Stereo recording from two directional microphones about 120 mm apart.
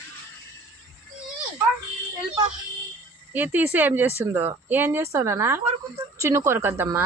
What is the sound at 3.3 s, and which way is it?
Speech, 15° right (ahead or behind).